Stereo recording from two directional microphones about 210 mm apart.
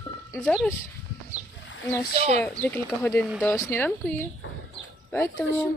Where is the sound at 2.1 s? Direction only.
30° right (ahead or behind).